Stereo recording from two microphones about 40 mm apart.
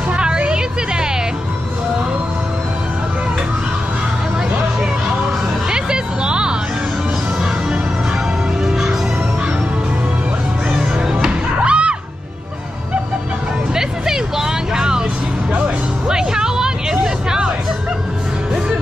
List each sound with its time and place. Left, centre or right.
0.1 s a sound: right
5.7 s music: right
8.6 s music: centre
11.1 s music: centre
11.6 s music: right
13.7 s vehicle: centre
16.1 s music: centre
17.0 s hubbub: centre